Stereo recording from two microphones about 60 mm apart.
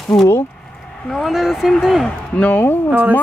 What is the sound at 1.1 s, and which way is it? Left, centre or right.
Speech, centre.